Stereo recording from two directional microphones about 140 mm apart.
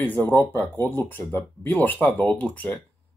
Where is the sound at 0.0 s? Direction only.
15° left (ahead or behind).